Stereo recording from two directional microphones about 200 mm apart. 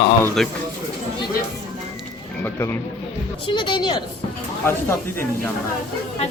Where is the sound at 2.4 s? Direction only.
10° left (ahead or behind).